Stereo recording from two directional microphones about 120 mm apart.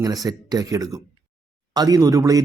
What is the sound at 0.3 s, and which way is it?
Speech, 30° right (ahead or behind).